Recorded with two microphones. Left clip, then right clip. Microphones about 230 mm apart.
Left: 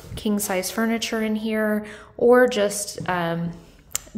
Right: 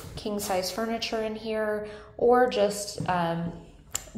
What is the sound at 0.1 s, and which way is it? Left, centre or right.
A woman's voice, left.